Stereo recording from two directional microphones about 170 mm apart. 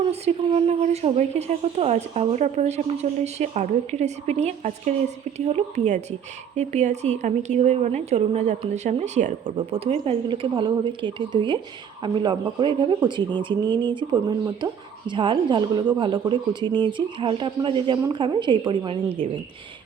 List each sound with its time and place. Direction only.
0.1 s a woman's voice: 40° right (ahead or behind)